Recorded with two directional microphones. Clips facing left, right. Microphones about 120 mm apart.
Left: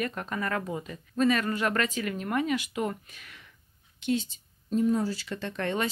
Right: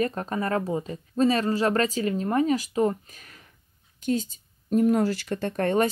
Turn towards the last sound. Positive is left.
turn(degrees=-45)  # may be behind; listen again after turning